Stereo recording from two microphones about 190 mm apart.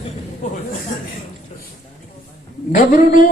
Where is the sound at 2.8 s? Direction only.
45° left (ahead or behind).